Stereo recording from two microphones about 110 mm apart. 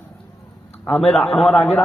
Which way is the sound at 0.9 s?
5° left (ahead or behind).